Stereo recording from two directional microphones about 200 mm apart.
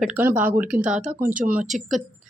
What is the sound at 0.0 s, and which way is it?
Speech, 10° right (ahead or behind).